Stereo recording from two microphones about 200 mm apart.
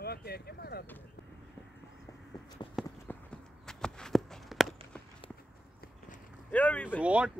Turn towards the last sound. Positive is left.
turn(degrees=-5)  # may be behind; listen again after turning